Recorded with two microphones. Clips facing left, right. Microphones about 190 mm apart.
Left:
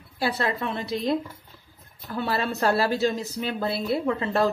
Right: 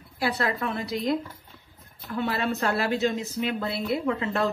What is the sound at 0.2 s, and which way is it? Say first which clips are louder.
Speech: left 1 dB; 25° left (ahead or behind).